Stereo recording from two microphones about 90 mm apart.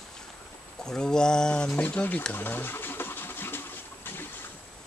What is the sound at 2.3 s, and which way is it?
Bird, 20° left (ahead or behind).